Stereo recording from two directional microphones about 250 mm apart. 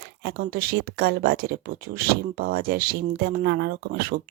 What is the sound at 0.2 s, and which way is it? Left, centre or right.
Speech, right.